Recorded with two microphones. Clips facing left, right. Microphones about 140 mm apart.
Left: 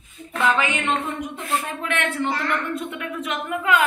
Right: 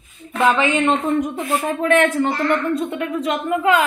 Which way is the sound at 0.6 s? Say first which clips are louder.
Right 6 dB; 35° right (ahead or behind).